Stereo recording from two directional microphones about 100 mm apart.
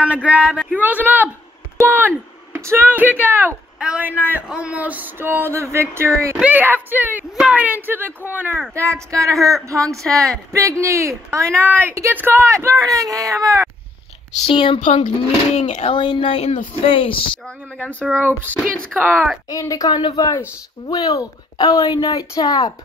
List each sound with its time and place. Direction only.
0.0 s a woman's voice: 15° right (ahead or behind); by 13.7 s 35° right (ahead or behind)
14.4 s speech: 55° left (ahead or behind)
15.5 s speech: 90° left
16.0 s speech: 55° left (ahead or behind)
17.7 s speech: 15° left (ahead or behind)
18.1 s a woman's voice: 20° right (ahead or behind)
18.9 s speech: 10° right (ahead or behind)
19.5 s speech: 35° left (ahead or behind)
19.9 s speech: 50° left (ahead or behind)
20.9 s speech: 35° left (ahead or behind)